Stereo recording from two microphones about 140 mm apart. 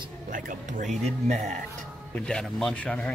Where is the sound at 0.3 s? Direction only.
70° right (ahead or behind).